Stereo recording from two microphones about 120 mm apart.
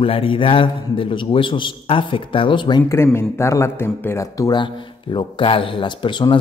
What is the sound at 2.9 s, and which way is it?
Speech, 20° left (ahead or behind).